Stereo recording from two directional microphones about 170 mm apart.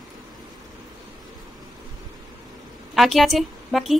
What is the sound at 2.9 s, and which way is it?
A woman's voice, centre (ahead or behind).